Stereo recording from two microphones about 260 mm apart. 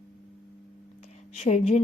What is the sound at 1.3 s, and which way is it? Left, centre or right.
Speech, left.